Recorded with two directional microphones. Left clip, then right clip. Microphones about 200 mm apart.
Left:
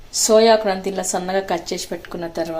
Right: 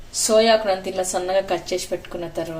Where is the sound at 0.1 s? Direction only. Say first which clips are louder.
Left 3 dB; 30° left (ahead or behind).